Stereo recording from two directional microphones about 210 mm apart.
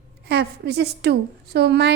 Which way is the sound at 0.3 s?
50° right (ahead or behind).